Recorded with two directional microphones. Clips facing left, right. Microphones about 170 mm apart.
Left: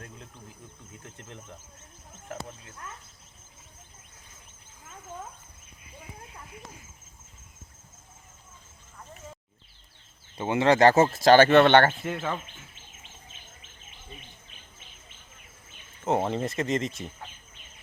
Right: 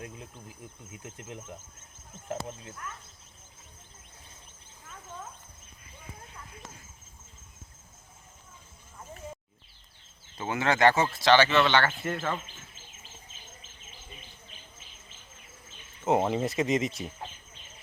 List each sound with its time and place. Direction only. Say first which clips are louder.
1.1 s speech: right 4 dB; 10° right (ahead or behind)
2.3 s speech: right 4 dB; 25° right (ahead or behind)
10.3 s speech: left 6 dB; 30° left (ahead or behind); by 11.9 s 55° left (ahead or behind)
12.0 s speech: even; centre (ahead or behind)
16.0 s speech: right 1 dB; 5° right (ahead or behind)